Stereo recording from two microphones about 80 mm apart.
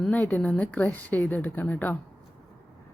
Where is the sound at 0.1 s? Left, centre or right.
Centre.